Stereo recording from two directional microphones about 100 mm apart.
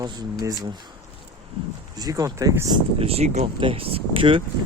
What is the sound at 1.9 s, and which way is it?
Speech, 40° right (ahead or behind).